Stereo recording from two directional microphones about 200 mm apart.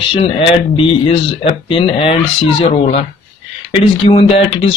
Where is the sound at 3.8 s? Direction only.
30° left (ahead or behind).